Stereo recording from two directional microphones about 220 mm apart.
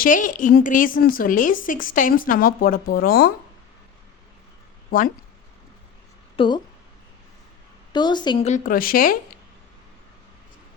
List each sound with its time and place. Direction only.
0.0 s a woman's voice: 35° left (ahead or behind)
4.9 s speech: 40° left (ahead or behind)
6.3 s a woman's voice: 20° left (ahead or behind)
7.9 s a woman's voice: 20° left (ahead or behind); by 9.1 s 40° left (ahead or behind)